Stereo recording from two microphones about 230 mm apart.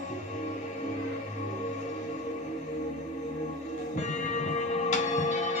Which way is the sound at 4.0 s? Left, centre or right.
Left.